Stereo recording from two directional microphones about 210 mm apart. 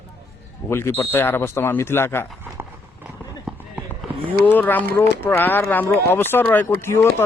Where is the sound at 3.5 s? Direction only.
Centre (ahead or behind).